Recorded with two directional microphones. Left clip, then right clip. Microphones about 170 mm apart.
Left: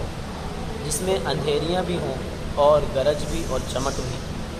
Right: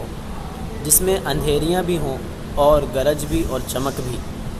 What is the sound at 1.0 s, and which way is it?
Speech, 50° right (ahead or behind).